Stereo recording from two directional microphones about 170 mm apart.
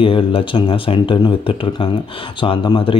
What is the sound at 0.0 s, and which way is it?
Speech, 30° left (ahead or behind).